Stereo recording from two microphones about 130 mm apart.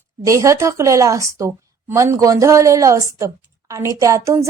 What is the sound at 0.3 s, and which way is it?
A woman's voice, 25° right (ahead or behind).